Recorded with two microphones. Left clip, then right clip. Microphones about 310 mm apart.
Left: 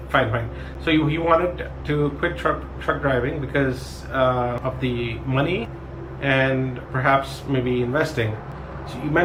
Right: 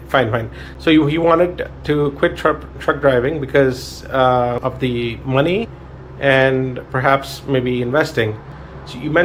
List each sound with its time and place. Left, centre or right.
0.1 s speech: centre